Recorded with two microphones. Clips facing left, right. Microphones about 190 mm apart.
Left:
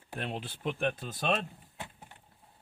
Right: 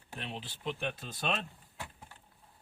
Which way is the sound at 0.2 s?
55° left (ahead or behind).